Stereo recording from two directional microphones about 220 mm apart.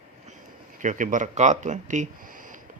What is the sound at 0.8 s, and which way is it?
Speech, 35° right (ahead or behind).